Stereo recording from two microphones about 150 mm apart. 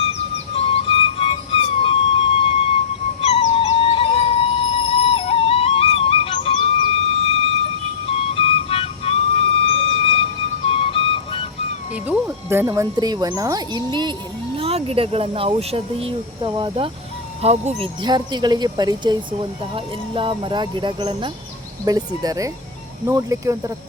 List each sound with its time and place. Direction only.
0.1 s music: 40° left (ahead or behind)
8.1 s music: 40° left (ahead or behind)
12.0 s speech: 15° right (ahead or behind); by 14.1 s 30° right (ahead or behind)
14.5 s speech: 40° right (ahead or behind)
17.4 s speech: 45° right (ahead or behind)
18.0 s speech: 30° right (ahead or behind)